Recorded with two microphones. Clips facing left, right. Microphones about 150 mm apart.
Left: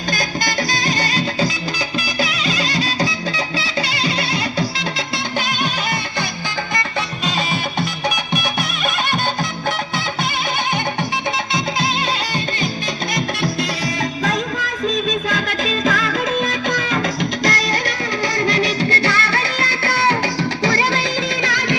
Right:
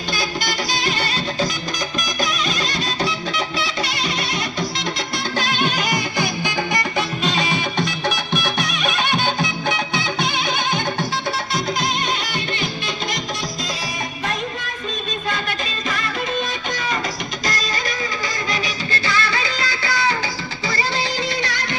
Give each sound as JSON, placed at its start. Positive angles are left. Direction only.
{"t": 0.1, "sound": "music", "side_deg": 45}
{"t": 7.3, "sound": "music", "side_deg": 5}
{"t": 9.1, "sound": "music", "side_deg": 0}
{"t": 15.3, "sound": "music", "side_deg": 90}
{"t": 20.7, "sound": "music", "side_deg": 90}